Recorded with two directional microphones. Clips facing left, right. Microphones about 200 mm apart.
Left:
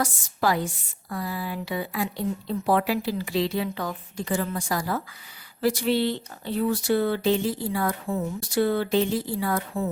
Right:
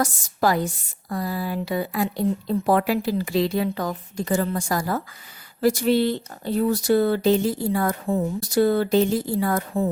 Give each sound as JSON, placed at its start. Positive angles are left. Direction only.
{"t": 0.0, "sound": "speech", "side_deg": -40}